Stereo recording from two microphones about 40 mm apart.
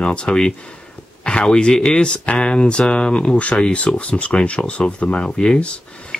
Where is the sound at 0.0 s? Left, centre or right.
Left.